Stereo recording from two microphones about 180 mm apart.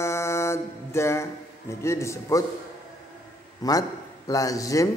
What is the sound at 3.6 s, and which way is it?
Speech, 20° left (ahead or behind).